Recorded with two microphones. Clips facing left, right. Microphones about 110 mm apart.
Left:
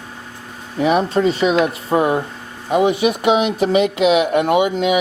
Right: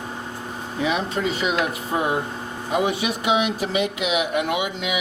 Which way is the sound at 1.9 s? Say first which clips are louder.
Left 7 dB; 45° left (ahead or behind).